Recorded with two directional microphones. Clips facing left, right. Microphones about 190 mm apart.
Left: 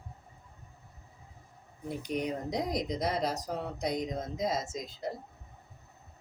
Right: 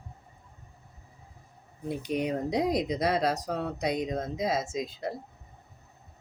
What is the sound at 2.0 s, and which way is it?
Speech, 60° right (ahead or behind).